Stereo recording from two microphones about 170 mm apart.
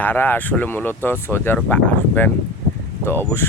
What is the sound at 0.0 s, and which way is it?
Speech, 10° left (ahead or behind).